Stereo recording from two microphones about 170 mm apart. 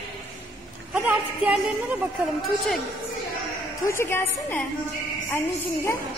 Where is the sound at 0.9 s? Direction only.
5° right (ahead or behind).